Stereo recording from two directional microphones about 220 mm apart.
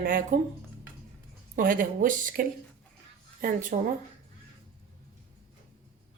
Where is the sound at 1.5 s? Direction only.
40° right (ahead or behind).